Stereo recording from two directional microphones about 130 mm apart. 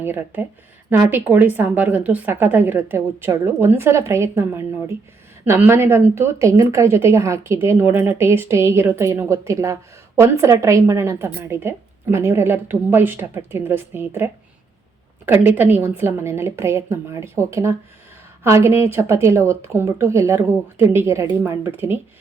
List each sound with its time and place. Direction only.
0.0 s a woman's voice: 15° right (ahead or behind)
15.3 s a woman's voice: 15° right (ahead or behind)